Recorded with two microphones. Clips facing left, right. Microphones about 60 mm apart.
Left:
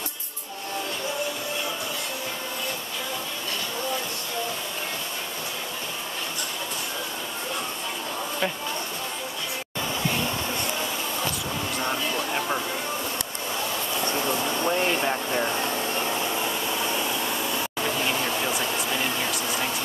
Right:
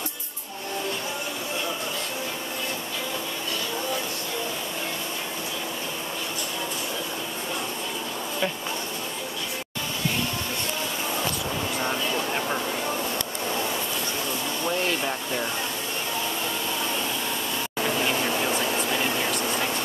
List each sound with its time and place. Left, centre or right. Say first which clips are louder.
11.8 s vehicle: even; centre
14.6 s vehicle: left 1 dB; left
16.4 s vacuum cleaner: left 1 dB; centre
17.7 s vehicle: right 3 dB; centre